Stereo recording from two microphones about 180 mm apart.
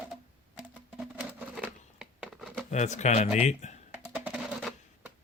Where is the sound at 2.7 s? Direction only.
40° left (ahead or behind).